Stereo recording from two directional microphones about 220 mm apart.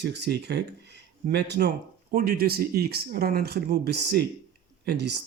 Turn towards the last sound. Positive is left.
turn(degrees=-50)  # may be behind; listen again after turning